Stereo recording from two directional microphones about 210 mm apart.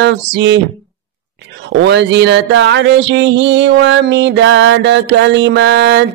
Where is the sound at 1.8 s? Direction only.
55° right (ahead or behind).